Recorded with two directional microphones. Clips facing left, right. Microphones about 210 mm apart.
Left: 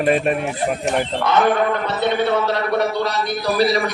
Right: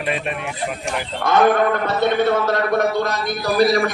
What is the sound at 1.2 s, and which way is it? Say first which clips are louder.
A man's voice: right 4 dB; 45° right (ahead or behind).